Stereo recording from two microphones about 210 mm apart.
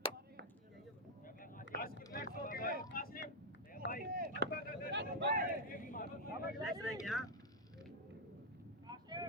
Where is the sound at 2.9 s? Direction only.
45° left (ahead or behind).